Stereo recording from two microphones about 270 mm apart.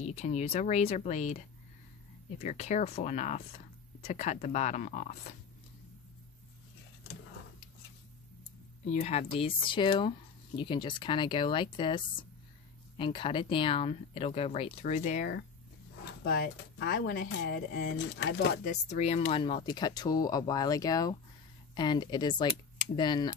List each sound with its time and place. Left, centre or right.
0.0 s speech: left
8.8 s speech: left